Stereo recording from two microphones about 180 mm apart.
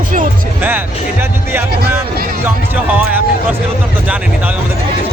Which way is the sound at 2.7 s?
10° right (ahead or behind).